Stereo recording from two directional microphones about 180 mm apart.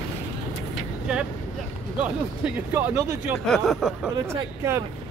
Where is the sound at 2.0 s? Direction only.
10° right (ahead or behind).